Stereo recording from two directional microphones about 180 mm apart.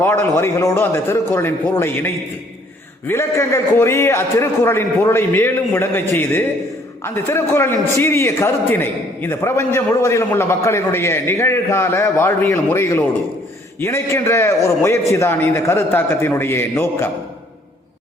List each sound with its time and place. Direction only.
0.0 s a man's voice: 10° left (ahead or behind)
3.1 s a man's voice: 15° left (ahead or behind)